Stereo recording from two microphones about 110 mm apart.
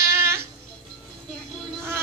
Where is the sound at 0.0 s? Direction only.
25° right (ahead or behind).